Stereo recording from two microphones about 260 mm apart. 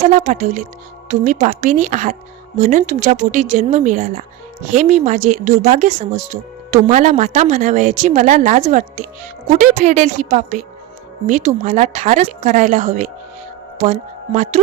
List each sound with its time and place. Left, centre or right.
0.1 s speech: right